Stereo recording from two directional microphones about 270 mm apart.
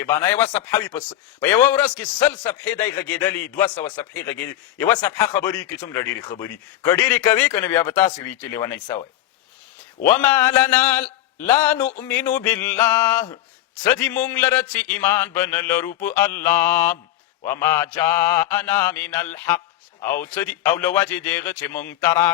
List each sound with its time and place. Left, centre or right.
0.0 s a man's voice: centre
10.1 s a man's voice: centre